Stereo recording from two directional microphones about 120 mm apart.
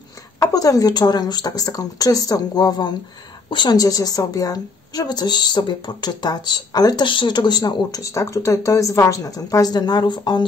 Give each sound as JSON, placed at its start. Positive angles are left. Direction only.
{"t": 0.4, "sound": "speech", "side_deg": 30}